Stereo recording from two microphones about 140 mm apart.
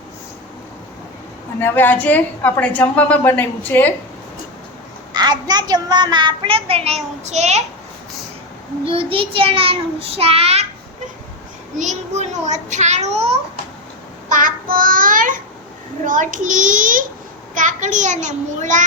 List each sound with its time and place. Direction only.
1.5 s a woman's voice: 15° left (ahead or behind)
5.1 s a child's voice: 30° right (ahead or behind); by 7.6 s 55° right (ahead or behind)
8.9 s a child's voice: 40° right (ahead or behind)
11.8 s a child's voice: 55° right (ahead or behind)
14.3 s child singing: 70° right (ahead or behind)
16.0 s a child's voice: 65° right (ahead or behind)